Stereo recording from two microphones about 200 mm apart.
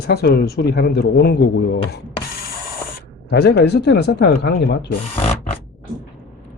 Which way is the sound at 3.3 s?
55° left (ahead or behind).